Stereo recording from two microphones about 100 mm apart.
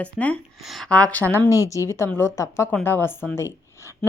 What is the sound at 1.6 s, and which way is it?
A woman's voice, 30° left (ahead or behind).